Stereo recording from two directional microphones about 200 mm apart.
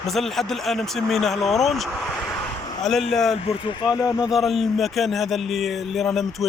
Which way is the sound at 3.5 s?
25° left (ahead or behind).